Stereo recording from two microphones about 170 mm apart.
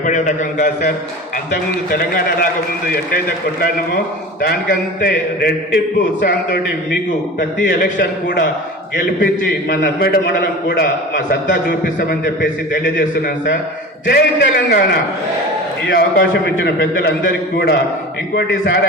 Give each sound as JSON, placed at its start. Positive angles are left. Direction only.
{"t": 0.0, "sound": "a man's voice", "side_deg": 50}
{"t": 1.9, "sound": "a man's voice", "side_deg": 60}
{"t": 7.7, "sound": "a man's voice", "side_deg": 60}
{"t": 12.2, "sound": "a man's voice", "side_deg": 90}
{"t": 14.1, "sound": "a man's voice", "side_deg": 65}
{"t": 15.9, "sound": "a man's voice", "side_deg": 65}